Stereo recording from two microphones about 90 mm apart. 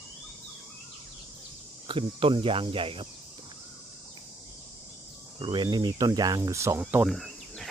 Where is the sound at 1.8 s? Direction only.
75° right (ahead or behind).